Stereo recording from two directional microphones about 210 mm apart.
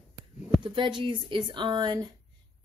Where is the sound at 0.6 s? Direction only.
20° right (ahead or behind).